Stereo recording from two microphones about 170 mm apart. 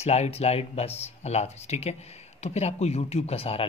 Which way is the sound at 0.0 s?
40° left (ahead or behind).